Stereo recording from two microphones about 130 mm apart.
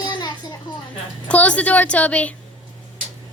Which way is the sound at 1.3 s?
10° left (ahead or behind).